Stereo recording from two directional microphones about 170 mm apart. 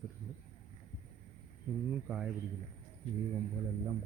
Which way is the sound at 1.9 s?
5° right (ahead or behind).